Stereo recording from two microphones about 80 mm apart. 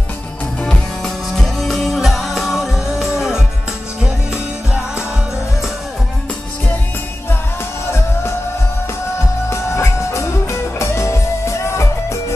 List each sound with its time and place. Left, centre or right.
0.6 s music: centre
9.5 s music: left